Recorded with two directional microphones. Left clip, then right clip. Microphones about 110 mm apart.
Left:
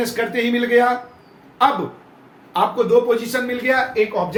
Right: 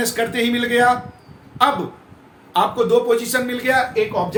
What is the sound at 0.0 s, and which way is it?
A man's voice, 50° right (ahead or behind).